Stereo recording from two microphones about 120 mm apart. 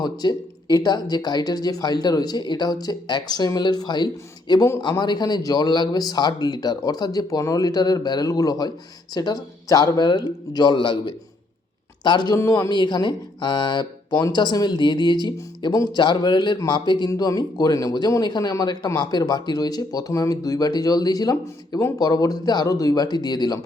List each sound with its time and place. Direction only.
0.0 s speech: 35° left (ahead or behind)